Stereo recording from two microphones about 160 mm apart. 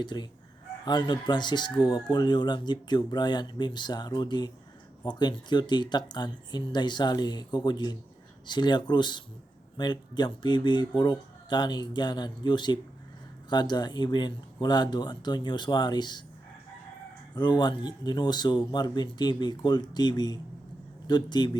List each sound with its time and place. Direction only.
0.0 s speech: 30° left (ahead or behind)
17.3 s speech: 25° left (ahead or behind)